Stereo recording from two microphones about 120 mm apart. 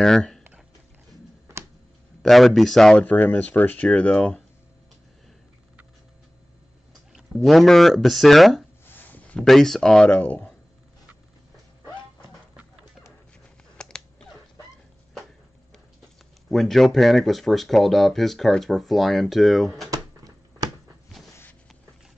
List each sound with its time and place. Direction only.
0.0 s speech: 5° left (ahead or behind)
2.2 s speech: centre (ahead or behind)
6.9 s clicking: centre (ahead or behind)
7.4 s speech: centre (ahead or behind)
8.8 s a sound: 15° left (ahead or behind)
9.4 s speech: 5° left (ahead or behind)
13.7 s a sound: 5° left (ahead or behind)
16.4 s speech: centre (ahead or behind)
19.9 s a sound: 30° right (ahead or behind)